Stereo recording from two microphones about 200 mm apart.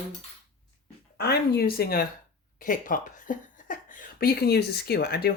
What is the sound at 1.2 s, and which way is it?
Speech, 55° left (ahead or behind).